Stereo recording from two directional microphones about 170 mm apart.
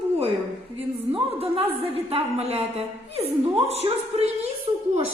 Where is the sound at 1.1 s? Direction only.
35° right (ahead or behind).